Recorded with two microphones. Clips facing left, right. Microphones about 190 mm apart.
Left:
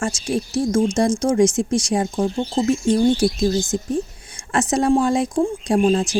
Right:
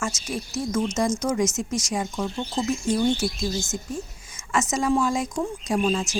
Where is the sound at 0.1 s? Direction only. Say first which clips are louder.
Left 8 dB; 30° left (ahead or behind).